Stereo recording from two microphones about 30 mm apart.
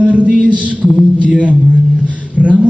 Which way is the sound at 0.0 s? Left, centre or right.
Right.